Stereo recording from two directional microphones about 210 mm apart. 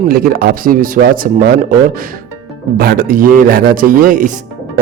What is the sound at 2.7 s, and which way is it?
A man's voice, 45° right (ahead or behind).